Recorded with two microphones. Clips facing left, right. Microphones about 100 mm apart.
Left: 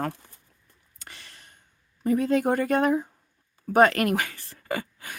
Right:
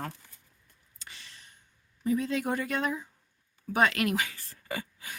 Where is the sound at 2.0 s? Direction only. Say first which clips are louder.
Left 6 dB; 55° left (ahead or behind).